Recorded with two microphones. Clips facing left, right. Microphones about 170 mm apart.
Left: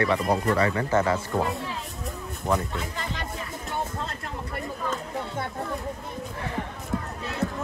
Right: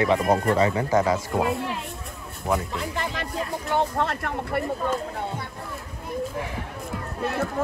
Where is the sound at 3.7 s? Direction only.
75° right (ahead or behind).